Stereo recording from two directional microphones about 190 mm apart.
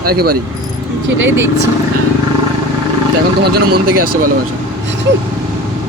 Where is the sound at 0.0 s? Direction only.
50° right (ahead or behind).